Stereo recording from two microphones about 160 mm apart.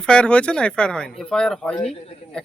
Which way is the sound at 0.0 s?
5° left (ahead or behind).